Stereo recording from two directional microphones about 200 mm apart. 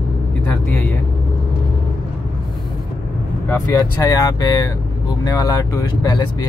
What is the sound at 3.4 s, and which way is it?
Speech, 15° left (ahead or behind).